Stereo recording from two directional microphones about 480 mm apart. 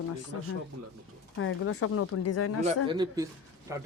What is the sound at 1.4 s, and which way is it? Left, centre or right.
Speech, left.